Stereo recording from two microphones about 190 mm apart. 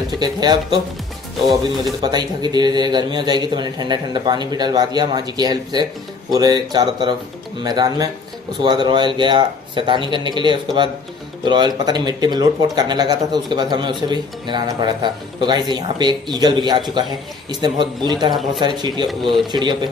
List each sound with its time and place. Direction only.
0.1 s speech: 20° right (ahead or behind)
2.0 s speech: 20° right (ahead or behind)